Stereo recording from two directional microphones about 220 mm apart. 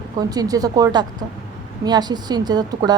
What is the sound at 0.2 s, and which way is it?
A woman's voice, 15° right (ahead or behind).